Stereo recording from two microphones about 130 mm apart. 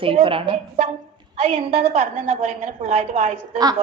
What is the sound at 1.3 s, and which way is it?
A woman's voice, 60° right (ahead or behind).